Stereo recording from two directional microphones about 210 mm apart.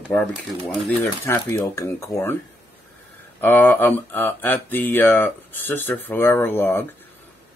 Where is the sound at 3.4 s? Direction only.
10° left (ahead or behind).